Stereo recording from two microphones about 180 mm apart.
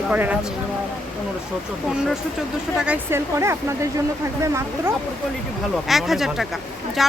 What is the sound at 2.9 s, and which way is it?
Speech, 15° right (ahead or behind).